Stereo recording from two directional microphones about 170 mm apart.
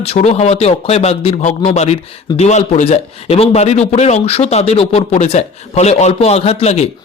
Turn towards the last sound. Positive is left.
turn(degrees=40)  # may be behind; listen again after turning